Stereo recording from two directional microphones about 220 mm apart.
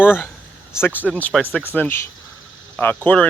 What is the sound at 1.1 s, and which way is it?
Speech, 5° left (ahead or behind).